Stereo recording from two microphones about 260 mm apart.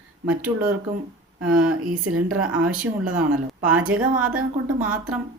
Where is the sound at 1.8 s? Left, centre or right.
Right.